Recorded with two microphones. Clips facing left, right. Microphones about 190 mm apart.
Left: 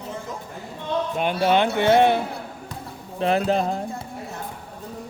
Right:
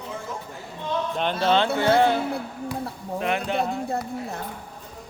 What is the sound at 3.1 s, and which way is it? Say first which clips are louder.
Speech: left 4 dB; 35° left (ahead or behind).